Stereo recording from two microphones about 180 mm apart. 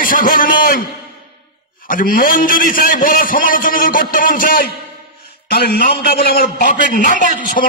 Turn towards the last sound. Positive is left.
turn(degrees=50)  # may be behind; listen again after turning